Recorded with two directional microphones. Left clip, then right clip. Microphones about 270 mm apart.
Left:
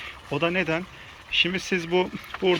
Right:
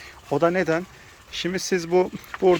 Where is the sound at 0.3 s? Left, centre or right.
Right.